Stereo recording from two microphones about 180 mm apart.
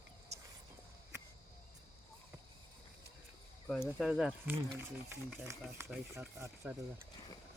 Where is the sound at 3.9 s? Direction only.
Centre (ahead or behind).